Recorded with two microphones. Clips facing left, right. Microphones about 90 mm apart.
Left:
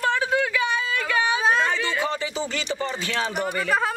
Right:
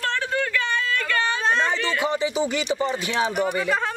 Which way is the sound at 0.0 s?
10° left (ahead or behind).